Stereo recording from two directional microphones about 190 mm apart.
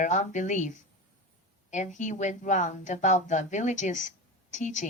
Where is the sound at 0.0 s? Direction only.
40° left (ahead or behind).